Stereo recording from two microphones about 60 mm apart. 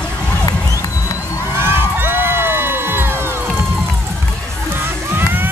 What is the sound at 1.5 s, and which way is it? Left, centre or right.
Crowd, right.